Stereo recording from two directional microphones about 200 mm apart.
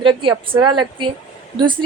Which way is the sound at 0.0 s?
25° right (ahead or behind).